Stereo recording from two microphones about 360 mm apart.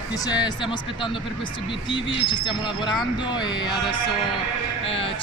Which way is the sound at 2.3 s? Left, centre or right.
Centre.